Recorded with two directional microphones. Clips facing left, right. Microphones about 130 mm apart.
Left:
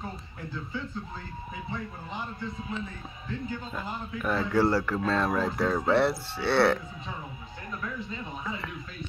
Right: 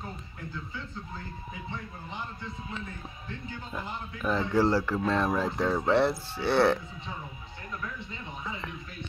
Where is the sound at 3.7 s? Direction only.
15° right (ahead or behind).